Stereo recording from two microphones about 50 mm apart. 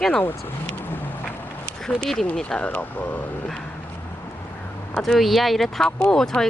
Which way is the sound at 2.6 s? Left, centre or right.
Left.